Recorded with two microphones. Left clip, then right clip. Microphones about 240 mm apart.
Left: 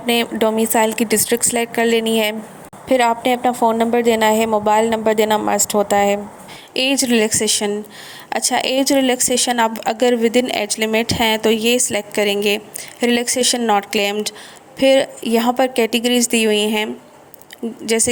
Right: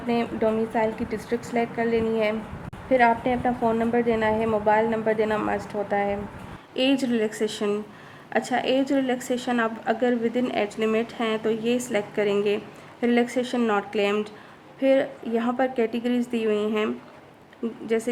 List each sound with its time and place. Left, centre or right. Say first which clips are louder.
0.1 s a woman's voice: left 7 dB; left